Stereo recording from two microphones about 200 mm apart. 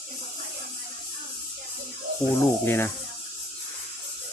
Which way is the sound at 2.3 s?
10° left (ahead or behind).